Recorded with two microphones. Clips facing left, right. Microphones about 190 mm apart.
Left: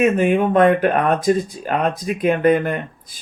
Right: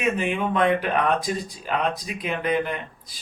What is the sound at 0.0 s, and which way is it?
Speech, 50° left (ahead or behind).